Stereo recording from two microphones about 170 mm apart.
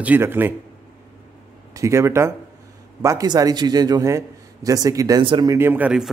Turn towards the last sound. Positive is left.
turn(degrees=-5)  # may be behind; listen again after turning